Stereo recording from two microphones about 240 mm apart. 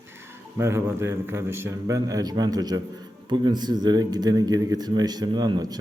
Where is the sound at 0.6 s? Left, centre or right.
Centre.